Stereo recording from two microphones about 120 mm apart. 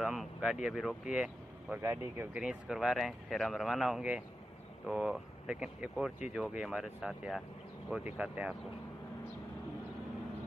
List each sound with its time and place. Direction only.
0.0 s speech: 5° right (ahead or behind)
1.8 s speech: 20° right (ahead or behind)
2.3 s speech: 5° right (ahead or behind)